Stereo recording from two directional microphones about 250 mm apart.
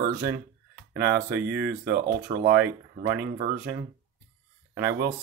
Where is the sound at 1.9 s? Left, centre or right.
Right.